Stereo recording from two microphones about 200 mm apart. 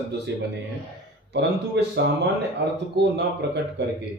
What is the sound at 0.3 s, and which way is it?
Speech, 60° right (ahead or behind).